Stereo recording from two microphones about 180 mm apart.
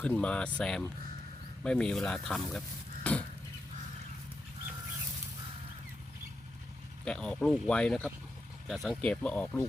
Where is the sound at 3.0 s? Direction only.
5° left (ahead or behind).